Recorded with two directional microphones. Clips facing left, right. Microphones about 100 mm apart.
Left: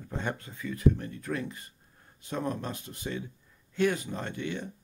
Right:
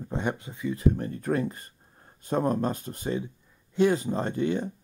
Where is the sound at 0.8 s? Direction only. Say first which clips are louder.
Even; 35° right (ahead or behind).